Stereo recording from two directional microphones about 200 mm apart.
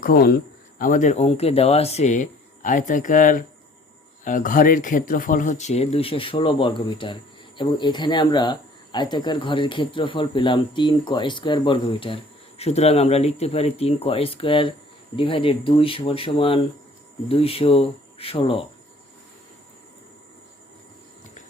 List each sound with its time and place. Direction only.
0.0 s speech: 50° left (ahead or behind); by 18.6 s 25° left (ahead or behind)